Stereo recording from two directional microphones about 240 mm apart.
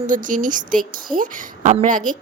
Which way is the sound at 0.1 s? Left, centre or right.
Right.